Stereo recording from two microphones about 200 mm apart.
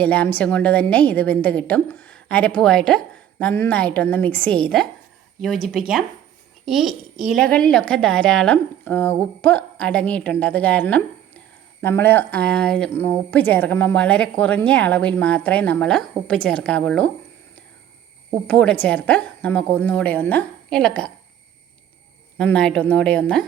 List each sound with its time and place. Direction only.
0.0 s speech: 5° left (ahead or behind)
18.4 s speech: 5° left (ahead or behind)
22.4 s speech: 5° left (ahead or behind)